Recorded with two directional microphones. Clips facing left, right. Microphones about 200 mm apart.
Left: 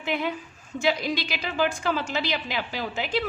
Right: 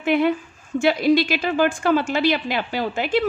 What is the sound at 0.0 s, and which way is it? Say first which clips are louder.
A woman's voice: right 9 dB; 55° right (ahead or behind).